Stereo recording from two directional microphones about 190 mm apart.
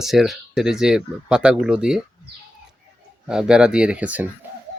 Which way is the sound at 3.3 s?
5° right (ahead or behind).